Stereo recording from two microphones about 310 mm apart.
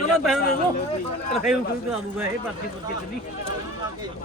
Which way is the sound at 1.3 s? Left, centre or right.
Centre.